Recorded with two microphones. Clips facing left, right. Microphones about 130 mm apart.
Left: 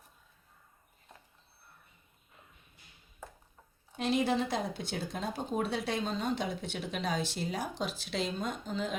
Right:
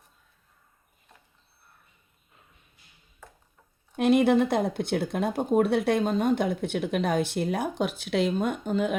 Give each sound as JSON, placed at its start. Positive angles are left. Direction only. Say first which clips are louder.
{"t": 3.9, "sound": "speech", "louder": "right 9 dB", "side_deg": -60}